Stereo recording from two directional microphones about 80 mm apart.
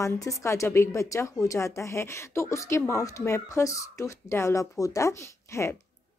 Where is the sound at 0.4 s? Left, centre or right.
Left.